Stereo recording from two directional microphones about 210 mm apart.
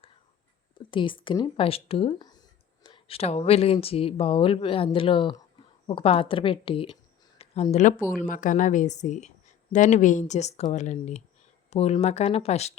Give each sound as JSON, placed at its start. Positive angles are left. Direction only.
{"t": 0.9, "sound": "speech", "side_deg": 25}